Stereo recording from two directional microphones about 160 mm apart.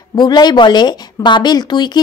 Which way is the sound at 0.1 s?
25° left (ahead or behind).